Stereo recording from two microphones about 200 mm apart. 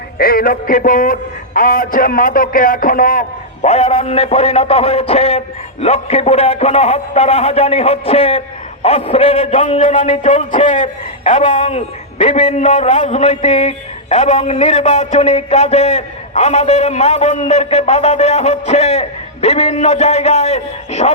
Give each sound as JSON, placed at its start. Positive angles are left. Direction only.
{"t": 0.2, "sound": "a man's voice", "side_deg": 50}